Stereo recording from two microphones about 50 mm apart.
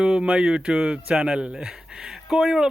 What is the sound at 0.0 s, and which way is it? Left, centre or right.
Speech, centre.